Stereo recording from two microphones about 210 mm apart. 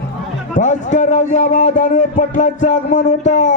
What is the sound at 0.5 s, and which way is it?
Speech, 35° left (ahead or behind).